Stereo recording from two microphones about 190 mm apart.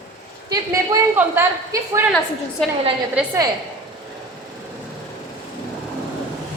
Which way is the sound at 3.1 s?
15° right (ahead or behind).